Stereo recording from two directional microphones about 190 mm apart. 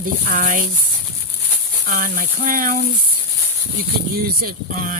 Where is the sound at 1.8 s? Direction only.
45° right (ahead or behind).